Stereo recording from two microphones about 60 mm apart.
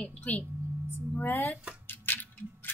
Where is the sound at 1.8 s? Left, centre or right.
Left.